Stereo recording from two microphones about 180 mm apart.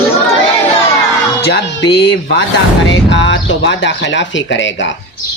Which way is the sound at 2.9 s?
90° left.